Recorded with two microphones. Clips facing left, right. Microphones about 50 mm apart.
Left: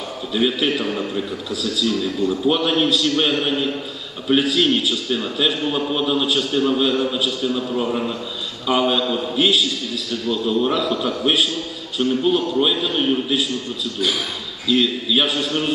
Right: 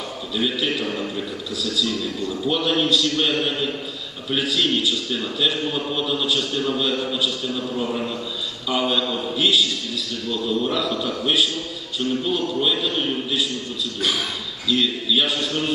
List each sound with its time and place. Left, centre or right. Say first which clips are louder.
0.3 s a man's voice: left 4 dB; centre
0.7 s a man's voice: left 3 dB; centre
1.1 s a man's voice: left 3 dB; centre
6.2 s a man's voice: left 4 dB; centre
10.2 s a man's voice: left 4 dB; centre
14.7 s a man's voice: left 3 dB; centre